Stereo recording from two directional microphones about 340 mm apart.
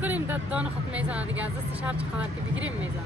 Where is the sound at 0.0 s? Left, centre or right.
Centre.